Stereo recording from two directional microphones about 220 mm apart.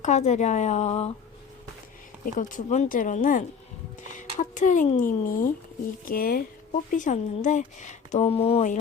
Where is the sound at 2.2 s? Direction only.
35° left (ahead or behind).